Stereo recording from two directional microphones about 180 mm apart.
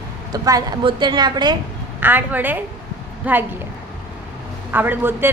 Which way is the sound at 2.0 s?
10° right (ahead or behind).